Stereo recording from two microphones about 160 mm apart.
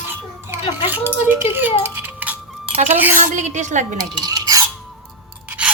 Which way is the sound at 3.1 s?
50° right (ahead or behind).